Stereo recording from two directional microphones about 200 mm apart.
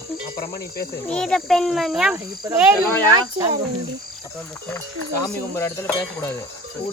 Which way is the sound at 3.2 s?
20° right (ahead or behind).